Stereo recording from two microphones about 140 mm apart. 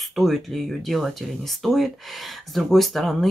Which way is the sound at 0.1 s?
Centre (ahead or behind).